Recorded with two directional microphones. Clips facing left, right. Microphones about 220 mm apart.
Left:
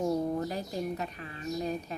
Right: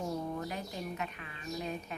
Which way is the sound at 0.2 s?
35° left (ahead or behind).